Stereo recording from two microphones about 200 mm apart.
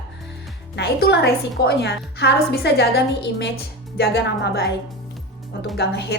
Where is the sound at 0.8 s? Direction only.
55° left (ahead or behind).